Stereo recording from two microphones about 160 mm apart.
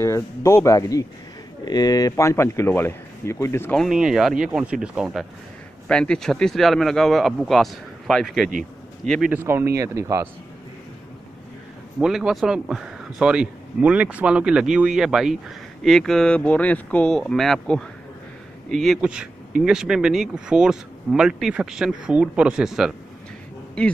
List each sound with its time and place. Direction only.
0.0 s speech: 15° left (ahead or behind)
3.7 s speech: centre (ahead or behind)
5.9 s speech: 5° left (ahead or behind)
9.3 s speech: 15° right (ahead or behind)
12.0 s speech: 5° right (ahead or behind)